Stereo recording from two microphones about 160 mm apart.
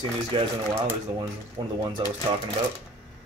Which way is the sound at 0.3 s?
30° right (ahead or behind).